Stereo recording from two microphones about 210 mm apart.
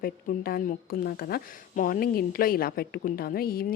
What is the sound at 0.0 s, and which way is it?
A woman's voice, 45° left (ahead or behind).